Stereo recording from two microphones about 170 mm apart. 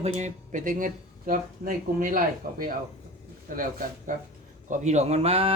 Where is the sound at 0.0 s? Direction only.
45° right (ahead or behind).